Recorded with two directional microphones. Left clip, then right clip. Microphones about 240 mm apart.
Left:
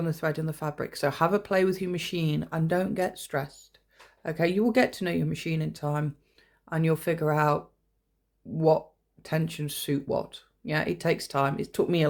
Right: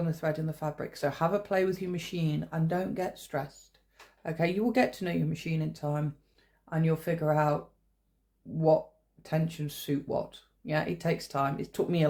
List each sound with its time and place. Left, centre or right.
0.0 s speech: left